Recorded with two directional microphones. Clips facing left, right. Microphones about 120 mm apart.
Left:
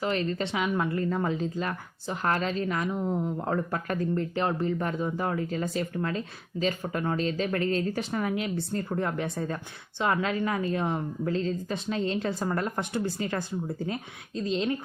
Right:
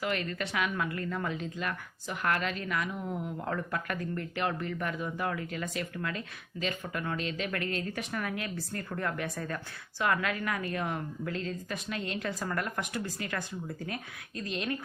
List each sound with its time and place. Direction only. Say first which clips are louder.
0.0 s a woman's voice: left 5 dB; 30° left (ahead or behind)